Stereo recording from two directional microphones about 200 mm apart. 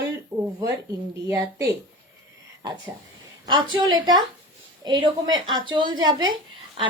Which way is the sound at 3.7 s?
25° right (ahead or behind).